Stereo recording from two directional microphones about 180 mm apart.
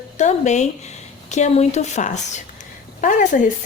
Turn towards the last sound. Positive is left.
turn(degrees=45)  # may be behind; listen again after turning